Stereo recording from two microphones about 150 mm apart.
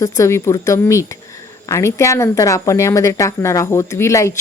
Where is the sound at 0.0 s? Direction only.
20° left (ahead or behind).